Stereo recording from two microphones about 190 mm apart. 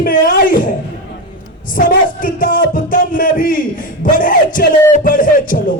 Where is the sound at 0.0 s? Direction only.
50° left (ahead or behind).